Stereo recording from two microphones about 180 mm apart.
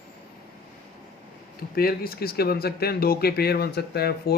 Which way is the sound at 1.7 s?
55° left (ahead or behind).